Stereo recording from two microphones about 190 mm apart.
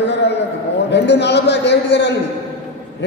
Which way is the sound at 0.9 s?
65° left (ahead or behind).